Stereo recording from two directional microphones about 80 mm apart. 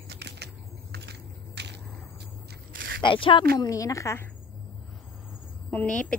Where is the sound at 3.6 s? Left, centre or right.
Left.